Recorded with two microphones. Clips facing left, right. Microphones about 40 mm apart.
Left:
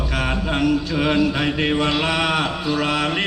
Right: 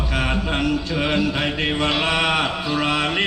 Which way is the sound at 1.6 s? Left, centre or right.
Centre.